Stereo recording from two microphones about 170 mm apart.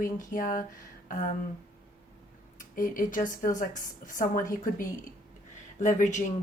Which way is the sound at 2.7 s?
55° left (ahead or behind).